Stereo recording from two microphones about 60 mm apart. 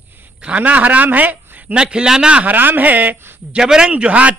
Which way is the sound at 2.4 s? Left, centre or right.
Right.